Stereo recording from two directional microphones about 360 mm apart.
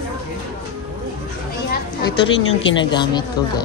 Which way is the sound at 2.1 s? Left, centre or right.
Left.